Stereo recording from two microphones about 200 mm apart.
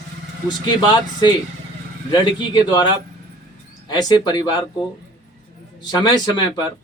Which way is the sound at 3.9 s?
20° left (ahead or behind).